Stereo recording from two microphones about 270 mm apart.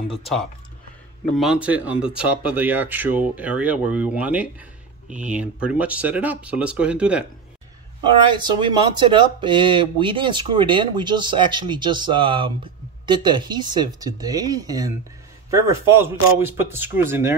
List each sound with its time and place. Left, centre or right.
0.2 s speech: centre
8.0 s speech: centre